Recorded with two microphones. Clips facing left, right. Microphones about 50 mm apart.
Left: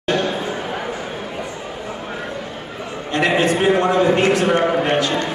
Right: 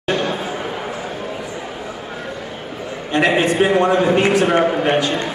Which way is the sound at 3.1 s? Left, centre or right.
Centre.